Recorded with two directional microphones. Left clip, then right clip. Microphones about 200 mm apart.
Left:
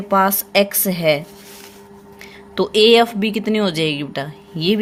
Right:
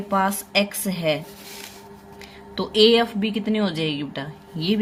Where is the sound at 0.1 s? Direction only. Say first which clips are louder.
Left 6 dB; 45° left (ahead or behind).